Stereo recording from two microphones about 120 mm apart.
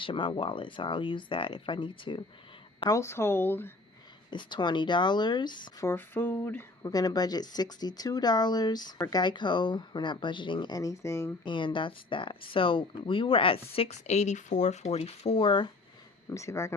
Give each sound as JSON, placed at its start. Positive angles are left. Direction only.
{"t": 0.0, "sound": "speech", "side_deg": 45}
{"t": 2.9, "sound": "speech", "side_deg": 20}
{"t": 4.3, "sound": "speech", "side_deg": 40}
{"t": 5.8, "sound": "speech", "side_deg": 20}
{"t": 6.9, "sound": "speech", "side_deg": 30}
{"t": 11.4, "sound": "speech", "side_deg": 45}
{"t": 16.3, "sound": "speech", "side_deg": 25}